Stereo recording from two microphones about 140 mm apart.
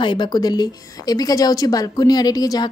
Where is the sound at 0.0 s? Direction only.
35° left (ahead or behind).